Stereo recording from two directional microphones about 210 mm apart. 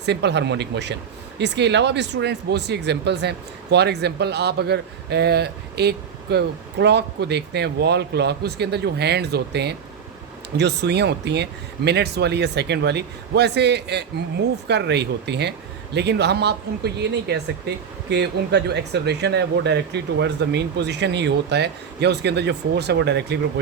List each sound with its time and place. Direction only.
0.0 s speech: 55° right (ahead or behind)